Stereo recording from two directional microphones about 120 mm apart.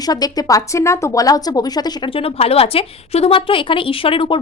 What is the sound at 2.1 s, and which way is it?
A woman's voice, 55° left (ahead or behind).